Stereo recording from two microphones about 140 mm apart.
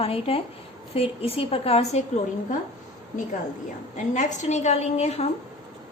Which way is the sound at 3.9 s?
60° left (ahead or behind).